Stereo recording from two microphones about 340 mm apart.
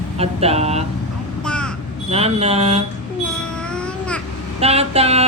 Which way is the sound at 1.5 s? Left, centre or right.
Centre.